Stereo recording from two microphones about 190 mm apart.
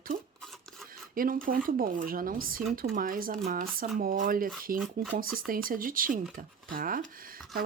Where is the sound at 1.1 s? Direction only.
45° right (ahead or behind).